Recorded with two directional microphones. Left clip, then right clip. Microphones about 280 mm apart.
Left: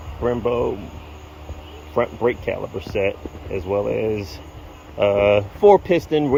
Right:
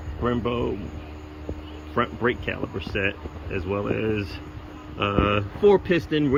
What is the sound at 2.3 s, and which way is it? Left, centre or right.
Speech, centre.